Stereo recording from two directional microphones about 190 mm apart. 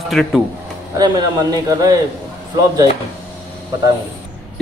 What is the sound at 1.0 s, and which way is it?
Speech, 20° right (ahead or behind).